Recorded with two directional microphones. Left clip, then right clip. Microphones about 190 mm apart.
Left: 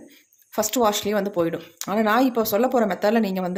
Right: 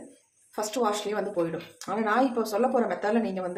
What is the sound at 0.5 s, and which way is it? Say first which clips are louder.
Speech: left 6 dB; 55° left (ahead or behind).